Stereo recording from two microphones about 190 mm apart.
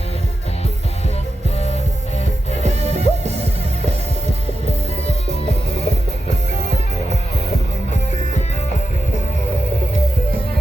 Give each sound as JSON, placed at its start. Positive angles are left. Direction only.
{"t": 1.5, "sound": "music", "side_deg": 35}
{"t": 2.6, "sound": "music", "side_deg": -35}
{"t": 5.3, "sound": "music", "side_deg": 35}